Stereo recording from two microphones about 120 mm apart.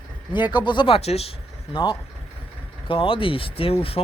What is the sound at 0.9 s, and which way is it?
Speech, 60° left (ahead or behind).